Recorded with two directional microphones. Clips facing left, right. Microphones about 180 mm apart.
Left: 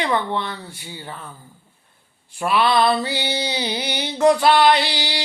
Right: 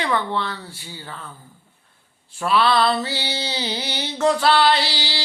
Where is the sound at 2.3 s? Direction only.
15° left (ahead or behind).